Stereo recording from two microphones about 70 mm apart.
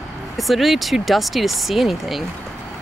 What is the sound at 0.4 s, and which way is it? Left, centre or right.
Speech, centre.